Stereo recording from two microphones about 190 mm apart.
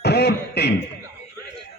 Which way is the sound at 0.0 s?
60° left (ahead or behind).